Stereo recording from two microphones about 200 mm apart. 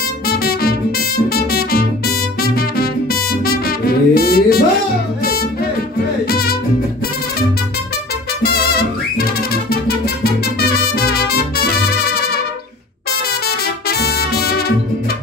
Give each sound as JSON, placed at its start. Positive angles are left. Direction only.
{"t": 0.4, "sound": "music", "side_deg": 50}
{"t": 8.4, "sound": "music", "side_deg": 50}